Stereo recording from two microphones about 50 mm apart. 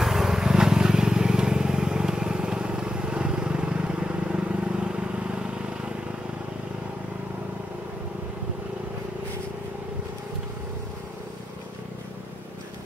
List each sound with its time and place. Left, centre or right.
0.0 s vehicle: centre